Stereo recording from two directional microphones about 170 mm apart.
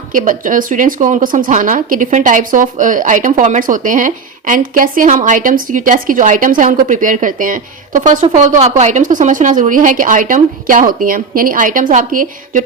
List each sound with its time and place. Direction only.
0.1 s speech: 50° right (ahead or behind)